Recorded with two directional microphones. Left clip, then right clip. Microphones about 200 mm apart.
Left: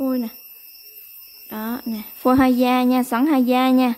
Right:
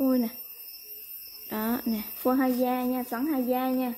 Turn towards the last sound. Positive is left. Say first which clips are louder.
# left 10 dB
turn(degrees=35)  # may be behind; listen again after turning